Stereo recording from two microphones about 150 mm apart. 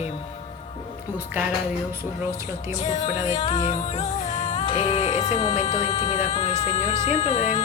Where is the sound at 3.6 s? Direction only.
50° left (ahead or behind).